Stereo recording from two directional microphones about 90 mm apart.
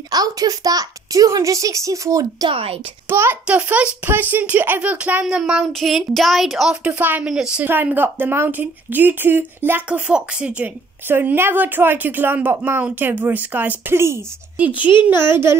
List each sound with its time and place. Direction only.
0.1 s a woman's voice: 45° right (ahead or behind)
2.5 s speech: 90° right
3.1 s a child's voice: 25° right (ahead or behind)
7.2 s speech: 10° right (ahead or behind)
7.6 s a woman's voice: 20° right (ahead or behind)
11.1 s a woman's voice: 25° right (ahead or behind)